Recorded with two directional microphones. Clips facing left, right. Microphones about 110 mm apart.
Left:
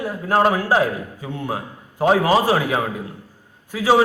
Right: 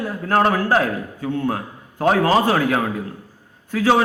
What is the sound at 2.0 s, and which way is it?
A man's voice, 15° left (ahead or behind).